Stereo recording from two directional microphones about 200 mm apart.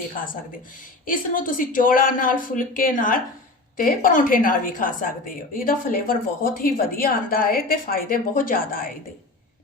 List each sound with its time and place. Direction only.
1.0 s a woman's voice: 45° left (ahead or behind)